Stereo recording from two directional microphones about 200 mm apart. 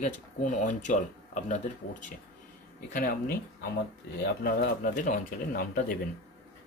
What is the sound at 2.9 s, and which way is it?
Speech, 40° left (ahead or behind).